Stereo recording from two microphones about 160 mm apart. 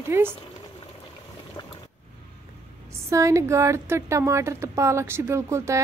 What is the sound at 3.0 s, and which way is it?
A woman's voice, 20° right (ahead or behind).